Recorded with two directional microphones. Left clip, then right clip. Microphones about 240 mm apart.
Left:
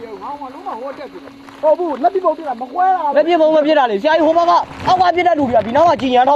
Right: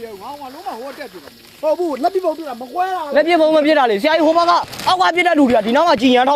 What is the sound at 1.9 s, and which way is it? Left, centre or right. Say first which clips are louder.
Speech: left 3 dB; right.